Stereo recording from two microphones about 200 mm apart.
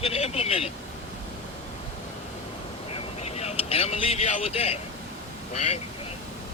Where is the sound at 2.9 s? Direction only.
30° left (ahead or behind).